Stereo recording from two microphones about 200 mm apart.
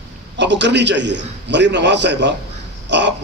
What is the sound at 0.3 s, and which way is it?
A man's voice, 60° right (ahead or behind).